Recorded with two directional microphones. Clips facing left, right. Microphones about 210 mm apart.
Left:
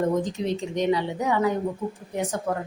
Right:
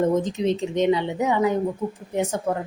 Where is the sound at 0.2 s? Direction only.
20° right (ahead or behind).